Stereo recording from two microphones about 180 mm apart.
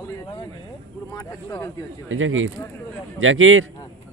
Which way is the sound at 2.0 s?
90° right.